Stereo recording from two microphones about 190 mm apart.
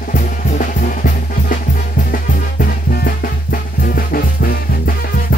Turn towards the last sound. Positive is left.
turn(degrees=50)  # may be behind; listen again after turning